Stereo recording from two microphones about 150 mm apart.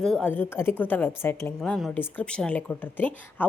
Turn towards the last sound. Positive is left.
turn(degrees=10)  # may be behind; listen again after turning